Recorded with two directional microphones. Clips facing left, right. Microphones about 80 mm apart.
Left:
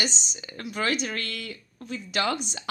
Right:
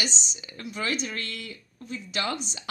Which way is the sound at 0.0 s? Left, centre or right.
Left.